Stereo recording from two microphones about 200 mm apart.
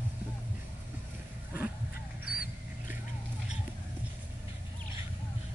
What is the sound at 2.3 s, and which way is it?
Dog, 45° left (ahead or behind).